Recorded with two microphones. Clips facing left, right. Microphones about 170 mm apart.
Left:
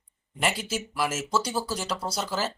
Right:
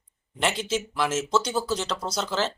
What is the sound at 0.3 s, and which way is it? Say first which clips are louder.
Speech: right 3 dB; 5° left (ahead or behind).